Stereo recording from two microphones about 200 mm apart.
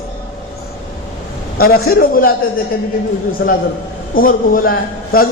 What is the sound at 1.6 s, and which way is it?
Speech, 50° left (ahead or behind).